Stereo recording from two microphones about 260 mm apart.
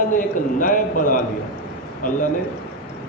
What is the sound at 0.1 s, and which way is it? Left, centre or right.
A man's voice, left.